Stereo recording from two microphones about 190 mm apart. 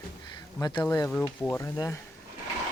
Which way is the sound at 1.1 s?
15° left (ahead or behind).